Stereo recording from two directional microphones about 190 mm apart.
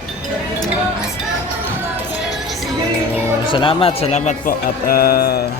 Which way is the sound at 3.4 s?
25° left (ahead or behind).